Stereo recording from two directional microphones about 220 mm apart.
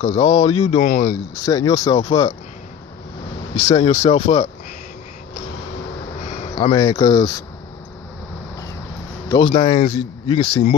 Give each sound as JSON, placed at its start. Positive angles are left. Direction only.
{"t": 0.0, "sound": "speech", "side_deg": 15}
{"t": 0.4, "sound": "speech", "side_deg": 30}
{"t": 1.1, "sound": "speech", "side_deg": 15}
{"t": 3.5, "sound": "speech", "side_deg": 20}
{"t": 6.5, "sound": "speech", "side_deg": 15}
{"t": 9.3, "sound": "speech", "side_deg": 20}